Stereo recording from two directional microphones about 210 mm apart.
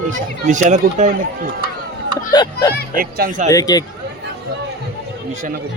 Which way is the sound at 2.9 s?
45° right (ahead or behind).